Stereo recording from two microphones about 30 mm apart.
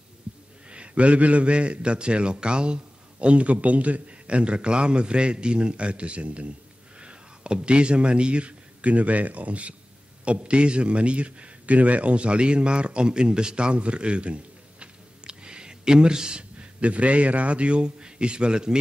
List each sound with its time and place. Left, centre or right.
0.7 s a man's voice: right
4.4 s a man's voice: right
7.0 s a man's voice: right
15.2 s a sound: right
16.5 s a man's voice: right